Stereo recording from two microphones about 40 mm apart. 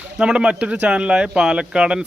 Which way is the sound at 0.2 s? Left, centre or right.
Right.